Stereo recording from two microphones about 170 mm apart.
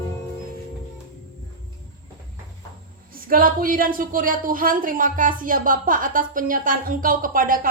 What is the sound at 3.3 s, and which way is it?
Speech, 55° right (ahead or behind).